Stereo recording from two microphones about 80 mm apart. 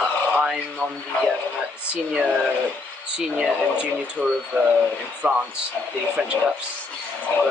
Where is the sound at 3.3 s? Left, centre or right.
Centre.